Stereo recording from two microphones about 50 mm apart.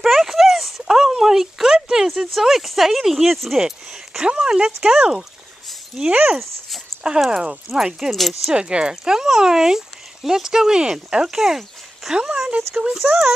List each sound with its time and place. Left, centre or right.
0.0 s a sound: centre
0.8 s speech: centre
6.0 s speech: centre
7.2 s speech: centre
8.1 s speech: centre
8.5 s speech: centre